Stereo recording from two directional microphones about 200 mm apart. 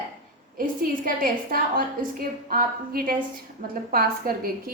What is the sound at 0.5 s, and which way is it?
A woman's voice, 45° right (ahead or behind).